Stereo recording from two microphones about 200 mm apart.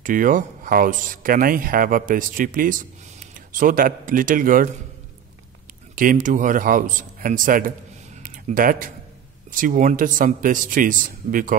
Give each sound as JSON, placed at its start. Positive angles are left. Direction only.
{"t": 0.0, "sound": "speech", "side_deg": -40}
{"t": 5.9, "sound": "speech", "side_deg": -40}
{"t": 8.2, "sound": "a sound", "side_deg": -45}
{"t": 9.5, "sound": "speech", "side_deg": -40}